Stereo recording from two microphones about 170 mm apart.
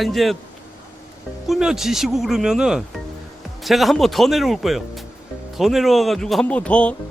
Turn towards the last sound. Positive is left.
turn(degrees=5)  # may be behind; listen again after turning